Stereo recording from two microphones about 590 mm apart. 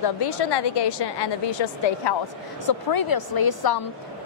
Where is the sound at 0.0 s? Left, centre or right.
Left.